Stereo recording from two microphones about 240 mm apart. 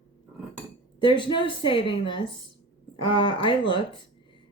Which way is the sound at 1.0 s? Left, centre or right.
Centre.